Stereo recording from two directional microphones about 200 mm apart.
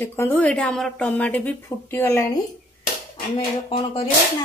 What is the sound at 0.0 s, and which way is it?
A woman's voice, 10° left (ahead or behind).